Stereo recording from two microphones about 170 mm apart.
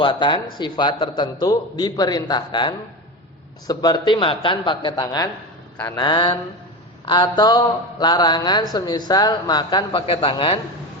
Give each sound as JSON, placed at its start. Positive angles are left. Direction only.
{"t": 0.0, "sound": "a man's voice", "side_deg": 30}